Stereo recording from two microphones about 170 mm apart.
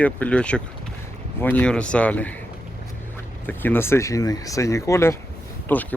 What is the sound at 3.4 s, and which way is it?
Speech, 10° left (ahead or behind).